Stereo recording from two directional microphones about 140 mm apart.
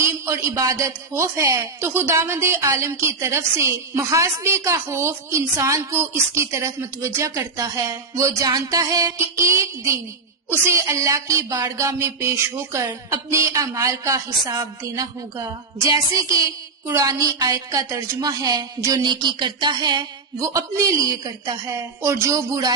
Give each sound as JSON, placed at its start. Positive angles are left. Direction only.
{"t": 0.0, "sound": "a woman's voice", "side_deg": -20}